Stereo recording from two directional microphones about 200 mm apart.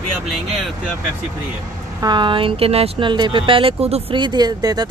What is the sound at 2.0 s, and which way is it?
Speech, 25° right (ahead or behind).